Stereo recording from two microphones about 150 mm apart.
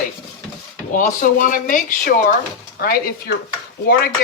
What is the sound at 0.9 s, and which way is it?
Speech, 60° left (ahead or behind).